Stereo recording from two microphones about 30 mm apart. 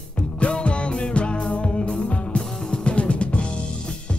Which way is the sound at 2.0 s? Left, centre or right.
Left.